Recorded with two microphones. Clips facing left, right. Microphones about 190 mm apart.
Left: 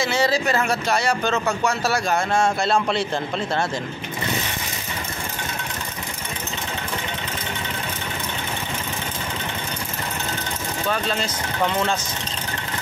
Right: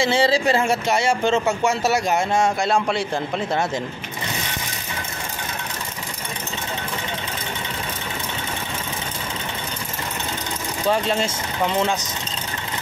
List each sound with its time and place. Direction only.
0.0 s speech: 30° right (ahead or behind); by 3.6 s 10° right (ahead or behind)
10.9 s speech: 25° right (ahead or behind)
11.6 s speech: 15° right (ahead or behind)